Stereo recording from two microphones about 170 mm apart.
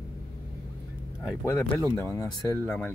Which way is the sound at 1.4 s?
15° left (ahead or behind).